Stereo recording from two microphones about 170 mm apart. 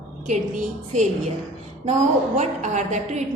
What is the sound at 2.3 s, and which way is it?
Speech, 45° right (ahead or behind).